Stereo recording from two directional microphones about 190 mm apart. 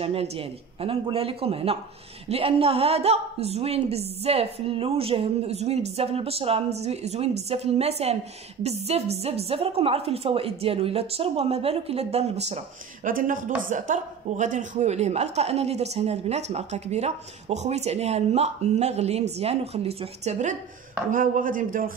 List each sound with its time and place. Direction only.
0.0 s a woman's voice: 30° right (ahead or behind)
13.0 s a woman's voice: 45° right (ahead or behind)